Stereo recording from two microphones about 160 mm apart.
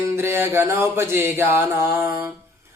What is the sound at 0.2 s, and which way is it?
Speech, 15° right (ahead or behind).